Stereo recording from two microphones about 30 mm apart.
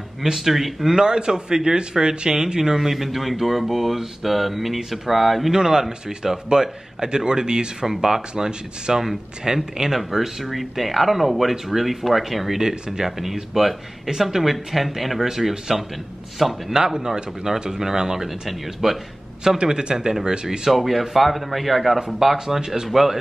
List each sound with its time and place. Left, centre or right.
0.2 s speech: centre
0.9 s speech: right; by 5.5 s centre
5.5 s speech: centre
9.9 s speech: centre
12.6 s speech: centre
13.2 s speech: centre
16.7 s speech: centre
18.5 s speech: centre
19.6 s speech: right
20.7 s speech: centre